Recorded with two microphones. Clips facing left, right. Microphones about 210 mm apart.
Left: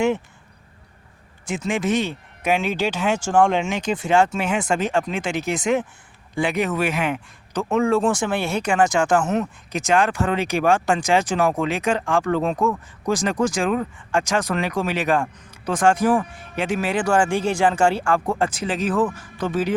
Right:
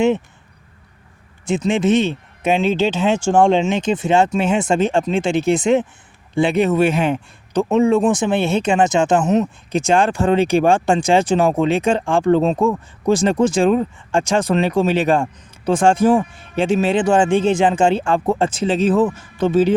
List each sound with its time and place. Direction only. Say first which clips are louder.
1.5 s speech: right 6 dB; 25° right (ahead or behind)